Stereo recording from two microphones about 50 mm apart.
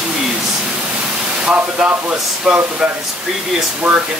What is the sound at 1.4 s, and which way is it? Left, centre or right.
Speech, right.